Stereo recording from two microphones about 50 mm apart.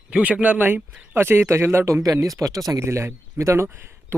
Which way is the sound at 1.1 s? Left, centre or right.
Right.